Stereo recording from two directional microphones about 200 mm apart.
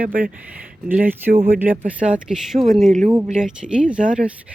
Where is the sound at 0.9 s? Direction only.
10° right (ahead or behind).